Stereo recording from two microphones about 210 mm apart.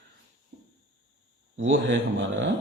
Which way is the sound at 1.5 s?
65° right (ahead or behind).